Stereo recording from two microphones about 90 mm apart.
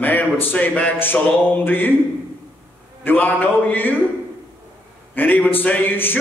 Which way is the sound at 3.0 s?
20° left (ahead or behind).